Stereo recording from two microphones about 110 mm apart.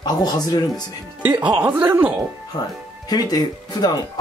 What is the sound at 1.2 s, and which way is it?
Speech, 10° right (ahead or behind).